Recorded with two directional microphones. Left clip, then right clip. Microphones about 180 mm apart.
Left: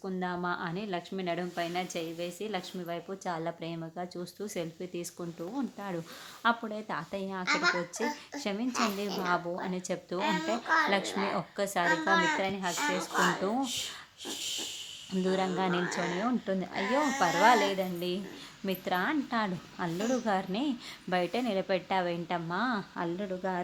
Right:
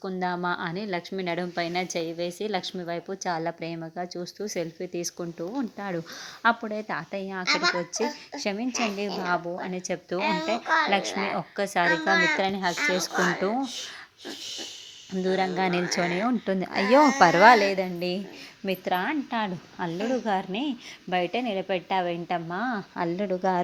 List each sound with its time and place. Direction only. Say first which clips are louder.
0.0 s a woman's voice: right 6 dB; 30° right (ahead or behind)
7.4 s speech: right 4 dB; 35° right (ahead or behind)
7.9 s a woman's voice: right 5 dB; 20° right (ahead or behind)
10.2 s speech: right 4 dB; 40° right (ahead or behind)
11.3 s a woman's voice: right 5 dB; 20° right (ahead or behind)
11.9 s speech: right 4 dB; 35° right (ahead or behind)
15.1 s a woman's voice: right 4 dB; 10° right (ahead or behind)
15.4 s a woman's voice: right 6 dB; 25° right (ahead or behind)
16.8 s speech: right 11 dB; 45° right (ahead or behind)
18.6 s a woman's voice: right 4 dB; 20° right (ahead or behind)
23.0 s speech: right 7 dB; 30° right (ahead or behind)